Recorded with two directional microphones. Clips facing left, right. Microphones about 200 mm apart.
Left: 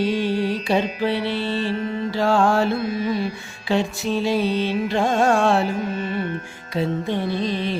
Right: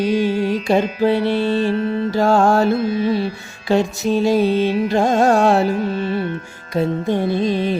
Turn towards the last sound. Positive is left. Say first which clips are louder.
# right 5 dB
turn(degrees=-45)  # may be behind; listen again after turning